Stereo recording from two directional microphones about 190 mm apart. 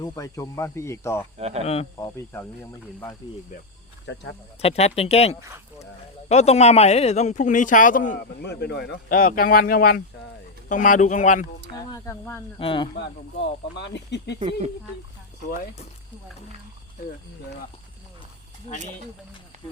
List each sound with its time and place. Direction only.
0.0 s speech: 20° left (ahead or behind)
1.4 s speech: 35° right (ahead or behind)
1.6 s speech: 30° left (ahead or behind)
2.3 s speech: 10° left (ahead or behind)
4.0 s speech: 70° left (ahead or behind)
4.6 s speech: 35° left (ahead or behind)
8.4 s speech: 60° left (ahead or behind); by 11.4 s 40° left (ahead or behind)
11.9 s speech: 15° left (ahead or behind)
12.5 s speech: 25° left (ahead or behind)
13.7 s speech: 65° left (ahead or behind)
14.3 s speech: 35° right (ahead or behind)
18.7 s speech: 35° left (ahead or behind)